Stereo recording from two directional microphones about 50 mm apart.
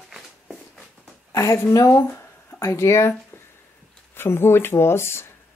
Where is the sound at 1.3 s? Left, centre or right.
Left.